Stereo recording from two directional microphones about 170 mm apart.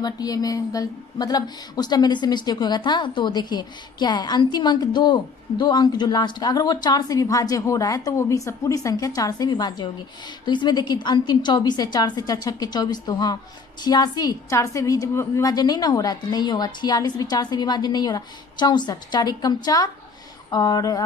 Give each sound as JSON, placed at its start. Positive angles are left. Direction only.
{"t": 0.0, "sound": "a woman's voice", "side_deg": 20}